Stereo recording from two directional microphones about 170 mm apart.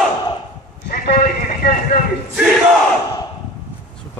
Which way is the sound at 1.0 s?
60° left (ahead or behind).